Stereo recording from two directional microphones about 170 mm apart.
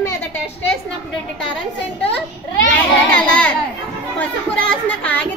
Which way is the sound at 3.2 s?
5° left (ahead or behind).